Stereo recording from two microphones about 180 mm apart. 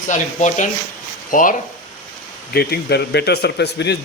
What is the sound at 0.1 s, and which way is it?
Speech, 45° left (ahead or behind).